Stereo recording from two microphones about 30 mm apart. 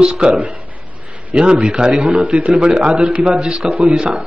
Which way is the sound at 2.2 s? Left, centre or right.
Right.